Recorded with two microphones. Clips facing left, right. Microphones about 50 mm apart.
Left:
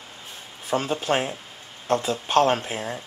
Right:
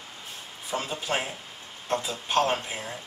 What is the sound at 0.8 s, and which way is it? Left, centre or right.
Speech, left.